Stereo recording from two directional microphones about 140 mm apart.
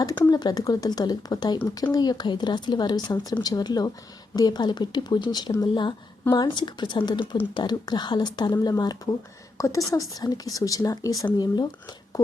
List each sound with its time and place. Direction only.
0.0 s speech: 30° left (ahead or behind)